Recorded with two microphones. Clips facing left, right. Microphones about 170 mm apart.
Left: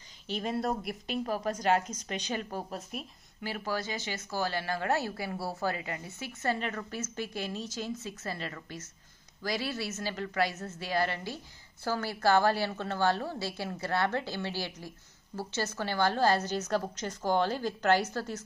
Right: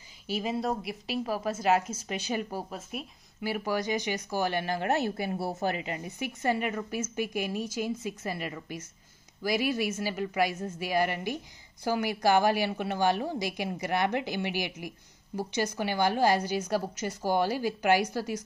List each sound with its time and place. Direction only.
0.3 s speech: 5° right (ahead or behind)